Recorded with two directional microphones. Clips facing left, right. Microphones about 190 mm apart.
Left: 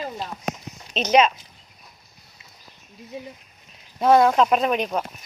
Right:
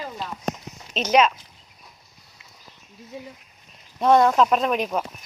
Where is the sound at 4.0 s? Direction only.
5° left (ahead or behind).